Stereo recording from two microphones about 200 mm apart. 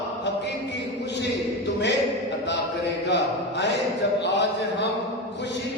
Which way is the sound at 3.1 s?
60° left (ahead or behind).